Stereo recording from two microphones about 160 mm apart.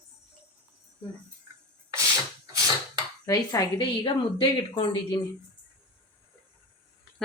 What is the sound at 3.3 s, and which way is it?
A woman's voice, 25° left (ahead or behind).